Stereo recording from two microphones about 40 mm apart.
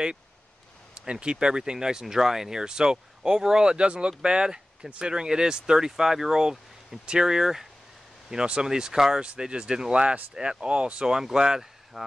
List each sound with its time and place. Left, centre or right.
1.0 s speech: right
9.2 s speech: right
11.1 s speech: centre